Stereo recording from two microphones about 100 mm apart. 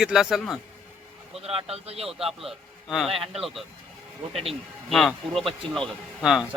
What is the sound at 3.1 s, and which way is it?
Speech, 70° right (ahead or behind).